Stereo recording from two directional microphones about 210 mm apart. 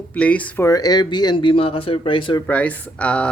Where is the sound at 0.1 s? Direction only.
5° left (ahead or behind); by 2.4 s 25° left (ahead or behind).